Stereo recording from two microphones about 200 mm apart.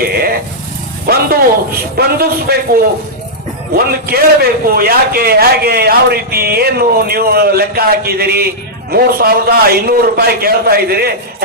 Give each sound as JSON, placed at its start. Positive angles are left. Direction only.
{"t": 0.0, "sound": "vehicle", "side_deg": -50}
{"t": 1.0, "sound": "a man's voice", "side_deg": -50}